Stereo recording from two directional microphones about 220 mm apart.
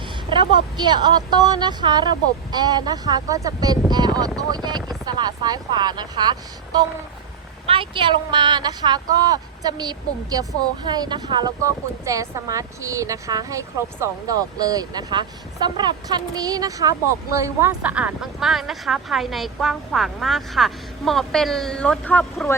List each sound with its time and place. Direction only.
0.3 s speech: 20° right (ahead or behind)
7.7 s a woman's voice: 25° right (ahead or behind); by 22.5 s 5° left (ahead or behind)